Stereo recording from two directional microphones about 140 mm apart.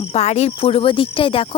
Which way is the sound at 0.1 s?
50° left (ahead or behind).